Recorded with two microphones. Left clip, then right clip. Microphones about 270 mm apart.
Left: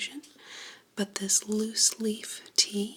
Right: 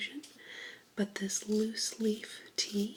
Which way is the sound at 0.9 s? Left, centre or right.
Centre.